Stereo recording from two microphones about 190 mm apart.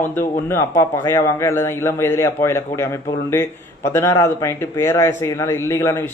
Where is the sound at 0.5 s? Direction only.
15° left (ahead or behind).